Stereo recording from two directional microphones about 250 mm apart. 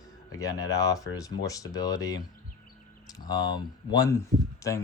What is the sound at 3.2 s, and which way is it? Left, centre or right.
Speech, centre.